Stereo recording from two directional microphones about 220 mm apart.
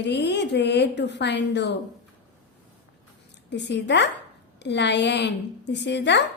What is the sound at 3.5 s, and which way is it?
A woman's voice, 50° left (ahead or behind).